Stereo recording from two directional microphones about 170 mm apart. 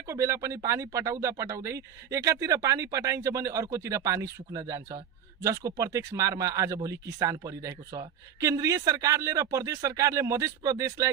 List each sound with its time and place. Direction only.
0.1 s speech: 15° right (ahead or behind)